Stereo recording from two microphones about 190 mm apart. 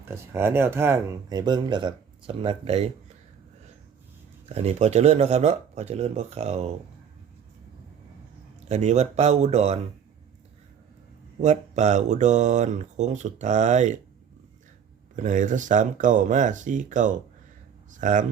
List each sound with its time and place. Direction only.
0.0 s speech: 15° right (ahead or behind); by 2.9 s 30° right (ahead or behind)
4.4 s speech: 35° right (ahead or behind)
8.7 s speech: 35° right (ahead or behind)
11.3 s speech: 40° right (ahead or behind)
15.1 s speech: 40° right (ahead or behind)